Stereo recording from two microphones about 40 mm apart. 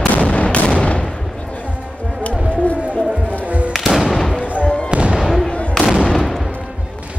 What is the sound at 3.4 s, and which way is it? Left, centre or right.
Music, right.